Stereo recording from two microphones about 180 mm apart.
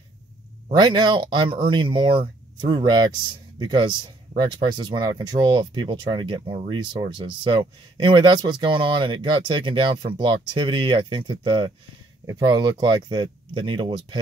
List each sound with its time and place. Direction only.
0.7 s speech: 25° right (ahead or behind)